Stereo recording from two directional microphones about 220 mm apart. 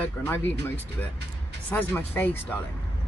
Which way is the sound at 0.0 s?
10° left (ahead or behind).